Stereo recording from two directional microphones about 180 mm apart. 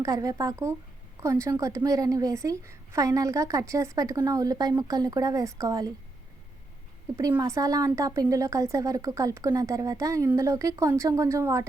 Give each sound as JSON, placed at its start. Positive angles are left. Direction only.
{"t": 0.0, "sound": "a woman's voice", "side_deg": -20}
{"t": 7.2, "sound": "a woman's voice", "side_deg": -20}